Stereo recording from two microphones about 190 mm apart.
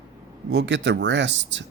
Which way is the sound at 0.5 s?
70° right (ahead or behind).